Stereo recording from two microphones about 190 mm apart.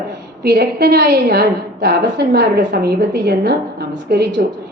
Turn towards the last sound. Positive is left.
turn(degrees=-65)  # may be behind; listen again after turning